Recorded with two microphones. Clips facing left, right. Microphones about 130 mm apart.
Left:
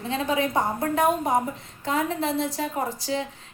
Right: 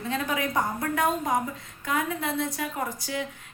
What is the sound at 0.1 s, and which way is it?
A woman's voice, 25° left (ahead or behind).